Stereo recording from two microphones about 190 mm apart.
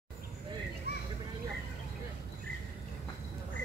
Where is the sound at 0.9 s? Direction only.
55° left (ahead or behind).